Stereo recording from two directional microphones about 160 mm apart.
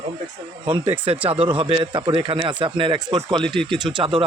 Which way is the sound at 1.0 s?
35° right (ahead or behind).